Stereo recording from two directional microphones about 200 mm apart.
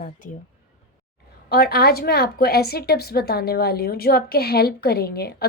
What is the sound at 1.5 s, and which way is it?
A woman's voice, 50° left (ahead or behind).